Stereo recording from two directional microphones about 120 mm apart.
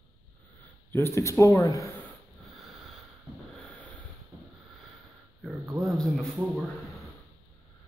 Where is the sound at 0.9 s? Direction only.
20° left (ahead or behind).